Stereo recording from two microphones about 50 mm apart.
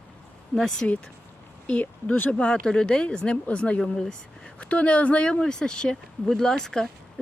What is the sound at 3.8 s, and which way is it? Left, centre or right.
Speech, centre.